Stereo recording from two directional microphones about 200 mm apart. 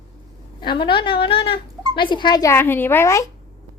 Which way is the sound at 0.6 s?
25° left (ahead or behind).